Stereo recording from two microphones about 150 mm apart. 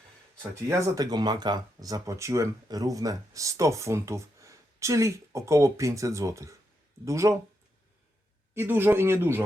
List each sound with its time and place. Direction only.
0.5 s speech: 25° right (ahead or behind)
8.5 s speech: 15° right (ahead or behind)